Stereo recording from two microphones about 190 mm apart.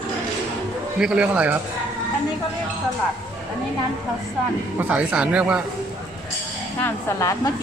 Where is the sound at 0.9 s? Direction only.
5° right (ahead or behind).